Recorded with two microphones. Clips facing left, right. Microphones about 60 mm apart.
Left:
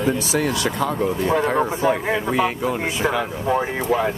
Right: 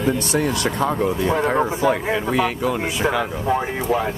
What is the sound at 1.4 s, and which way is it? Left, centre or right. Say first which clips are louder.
Speech: right 1 dB; centre.